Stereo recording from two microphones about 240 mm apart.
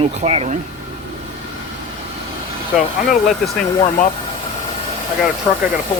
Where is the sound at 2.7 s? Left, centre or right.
Centre.